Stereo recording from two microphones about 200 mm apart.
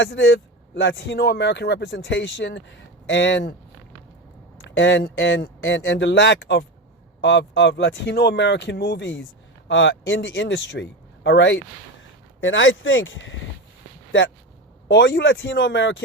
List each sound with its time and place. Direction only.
0.0 s speech: 65° left (ahead or behind)
4.8 s speech: 65° left (ahead or behind)
14.8 s speech: 70° left (ahead or behind)